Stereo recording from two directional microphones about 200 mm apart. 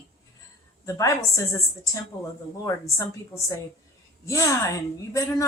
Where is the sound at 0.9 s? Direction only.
15° left (ahead or behind).